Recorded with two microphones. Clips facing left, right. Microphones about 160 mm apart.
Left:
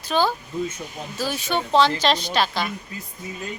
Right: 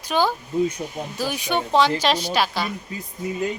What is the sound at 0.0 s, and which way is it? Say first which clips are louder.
Speech: even; 15° right (ahead or behind).